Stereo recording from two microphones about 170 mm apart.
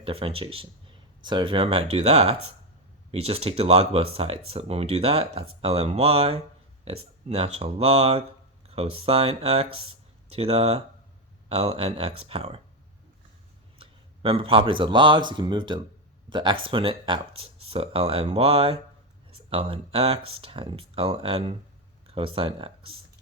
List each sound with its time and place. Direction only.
0.0 s speech: 35° right (ahead or behind)
13.7 s speech: 35° right (ahead or behind)